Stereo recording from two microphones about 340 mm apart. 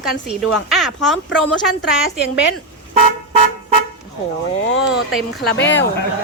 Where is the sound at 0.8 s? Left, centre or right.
Centre.